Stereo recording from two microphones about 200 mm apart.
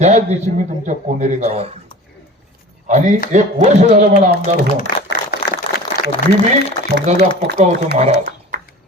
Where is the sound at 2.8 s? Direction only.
35° right (ahead or behind).